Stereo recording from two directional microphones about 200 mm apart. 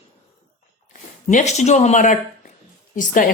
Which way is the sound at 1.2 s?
35° left (ahead or behind).